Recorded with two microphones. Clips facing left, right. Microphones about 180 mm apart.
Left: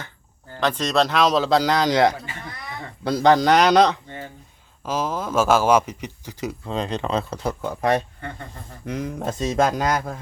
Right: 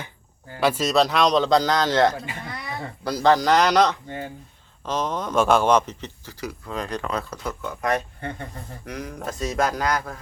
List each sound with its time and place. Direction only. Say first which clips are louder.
0.6 s a man's voice: right 1 dB; 5° right (ahead or behind); by 2.1 s 10° left (ahead or behind)
3.0 s speech: left 2 dB; 25° left (ahead or behind)
4.9 s a man's voice: left 1 dB; 5° left (ahead or behind)